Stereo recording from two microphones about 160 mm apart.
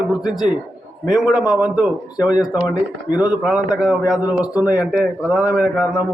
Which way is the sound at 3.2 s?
5° right (ahead or behind).